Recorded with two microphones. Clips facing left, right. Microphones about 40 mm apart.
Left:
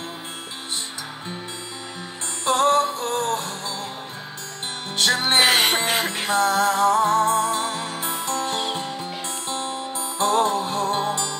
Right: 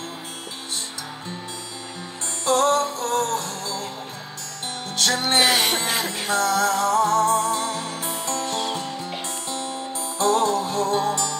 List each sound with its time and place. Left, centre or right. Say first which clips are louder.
2.4 s music: left 1 dB; left
4.9 s music: left 1 dB; left